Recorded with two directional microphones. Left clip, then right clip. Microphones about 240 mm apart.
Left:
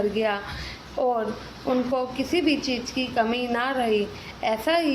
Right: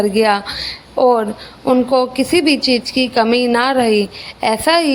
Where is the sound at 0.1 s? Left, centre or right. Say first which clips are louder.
Right 11 dB; right.